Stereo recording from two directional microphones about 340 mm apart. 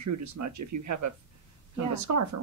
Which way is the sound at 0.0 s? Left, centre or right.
Right.